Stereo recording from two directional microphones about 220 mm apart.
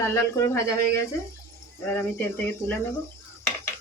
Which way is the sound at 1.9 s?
10° left (ahead or behind).